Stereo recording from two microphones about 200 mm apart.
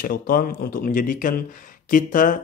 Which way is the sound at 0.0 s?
45° left (ahead or behind).